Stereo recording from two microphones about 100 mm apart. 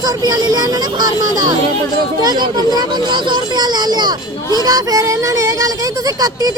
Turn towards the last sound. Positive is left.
turn(degrees=-40)  # may be behind; listen again after turning